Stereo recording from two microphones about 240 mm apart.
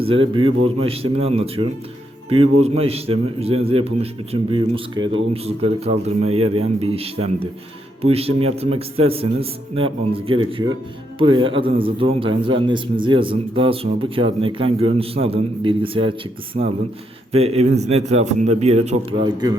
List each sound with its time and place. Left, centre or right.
0.0 s a man's voice: right